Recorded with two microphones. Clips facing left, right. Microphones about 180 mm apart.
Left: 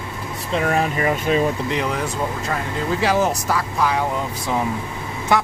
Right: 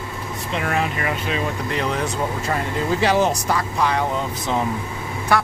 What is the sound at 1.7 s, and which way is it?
Speech, 10° left (ahead or behind).